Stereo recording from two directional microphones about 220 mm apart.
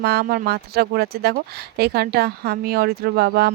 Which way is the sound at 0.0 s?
45° right (ahead or behind).